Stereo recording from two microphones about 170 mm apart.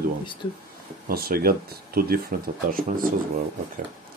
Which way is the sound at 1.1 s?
60° right (ahead or behind).